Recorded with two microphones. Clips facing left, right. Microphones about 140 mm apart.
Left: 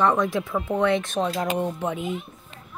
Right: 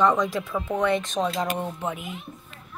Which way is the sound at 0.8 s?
15° right (ahead or behind).